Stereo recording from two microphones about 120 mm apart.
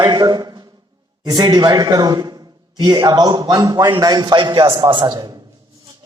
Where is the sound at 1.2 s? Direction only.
35° right (ahead or behind).